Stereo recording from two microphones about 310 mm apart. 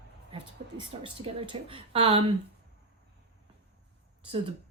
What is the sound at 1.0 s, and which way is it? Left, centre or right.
A woman's voice, centre.